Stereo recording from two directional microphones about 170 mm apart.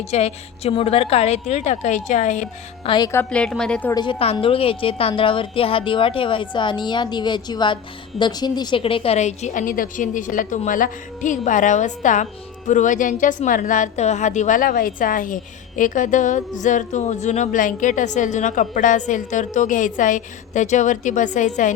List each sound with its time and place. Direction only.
0.0 s a woman's voice: 40° left (ahead or behind)
2.9 s a woman's voice: 20° left (ahead or behind)
3.2 s a woman's voice: 5° left (ahead or behind)
3.9 s a woman's voice: 30° left (ahead or behind); by 21.7 s 45° left (ahead or behind)